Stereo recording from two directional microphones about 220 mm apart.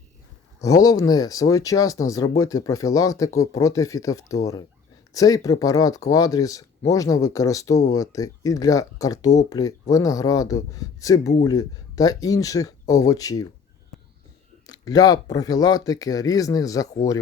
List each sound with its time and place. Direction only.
0.6 s speech: 15° left (ahead or behind)
14.7 s speech: 15° left (ahead or behind)